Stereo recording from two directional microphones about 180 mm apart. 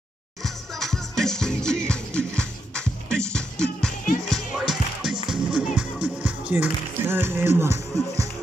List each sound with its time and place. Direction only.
0.4 s music: centre (ahead or behind); by 8.3 s 15° right (ahead or behind)